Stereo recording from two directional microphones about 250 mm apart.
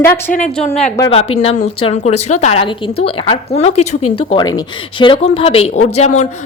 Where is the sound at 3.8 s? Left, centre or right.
Left.